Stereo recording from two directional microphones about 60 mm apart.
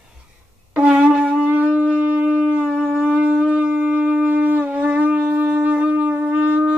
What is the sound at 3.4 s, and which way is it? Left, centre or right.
Wind instrument, right.